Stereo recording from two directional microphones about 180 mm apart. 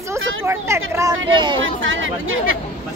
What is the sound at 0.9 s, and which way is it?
Speech, 20° right (ahead or behind).